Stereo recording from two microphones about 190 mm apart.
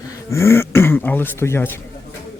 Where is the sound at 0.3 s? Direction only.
15° left (ahead or behind).